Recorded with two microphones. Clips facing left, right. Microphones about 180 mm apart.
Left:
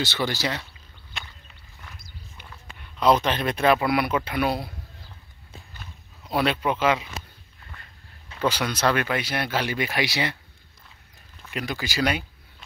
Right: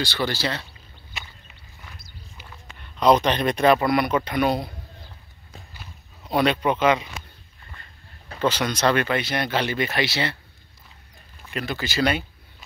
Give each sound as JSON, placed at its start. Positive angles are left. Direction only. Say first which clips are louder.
{"t": 0.0, "sound": "speech", "louder": "right 1 dB", "side_deg": 20}
{"t": 1.1, "sound": "a sound", "louder": "even", "side_deg": -5}
{"t": 2.8, "sound": "a sound", "louder": "right 2 dB", "side_deg": 5}
{"t": 3.3, "sound": "a man's voice", "louder": "right 3 dB", "side_deg": 5}
{"t": 5.7, "sound": "walk", "louder": "even", "side_deg": -5}
{"t": 6.3, "sound": "a man's voice", "louder": "right 3 dB", "side_deg": 5}
{"t": 8.4, "sound": "speech", "louder": "right 2 dB", "side_deg": 10}
{"t": 11.5, "sound": "speech", "louder": "right 2 dB", "side_deg": 15}